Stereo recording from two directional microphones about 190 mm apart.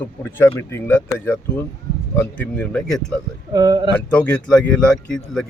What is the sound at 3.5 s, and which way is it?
Speech, 20° right (ahead or behind).